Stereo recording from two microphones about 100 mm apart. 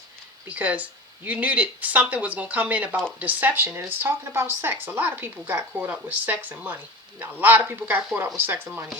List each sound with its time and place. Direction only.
0.4 s speech: 15° right (ahead or behind)